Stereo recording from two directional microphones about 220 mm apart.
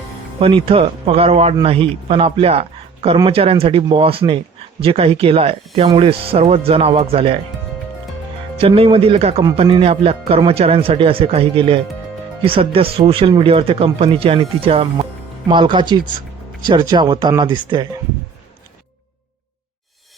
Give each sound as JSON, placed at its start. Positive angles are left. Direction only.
{"t": 0.3, "sound": "speech", "side_deg": -25}
{"t": 8.5, "sound": "speech", "side_deg": -25}